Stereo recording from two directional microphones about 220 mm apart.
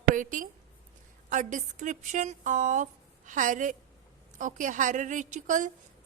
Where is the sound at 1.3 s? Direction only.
35° right (ahead or behind).